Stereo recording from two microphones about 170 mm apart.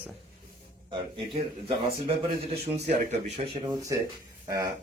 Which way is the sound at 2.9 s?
40° right (ahead or behind).